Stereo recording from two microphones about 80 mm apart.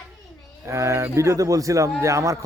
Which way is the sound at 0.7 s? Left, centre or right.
Right.